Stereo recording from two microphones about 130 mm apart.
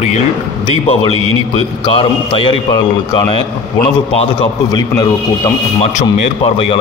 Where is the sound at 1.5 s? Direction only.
45° left (ahead or behind).